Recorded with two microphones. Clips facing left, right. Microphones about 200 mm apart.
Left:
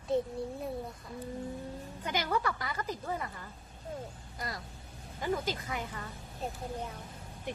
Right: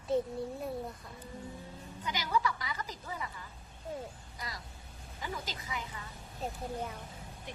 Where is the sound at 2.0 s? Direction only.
55° left (ahead or behind).